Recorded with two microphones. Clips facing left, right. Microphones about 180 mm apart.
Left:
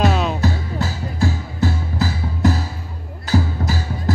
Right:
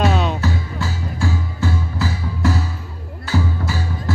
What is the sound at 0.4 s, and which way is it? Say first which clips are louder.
Music: left 2 dB; 40° left (ahead or behind).